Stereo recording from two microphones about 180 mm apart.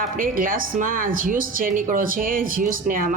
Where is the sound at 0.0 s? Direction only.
50° right (ahead or behind).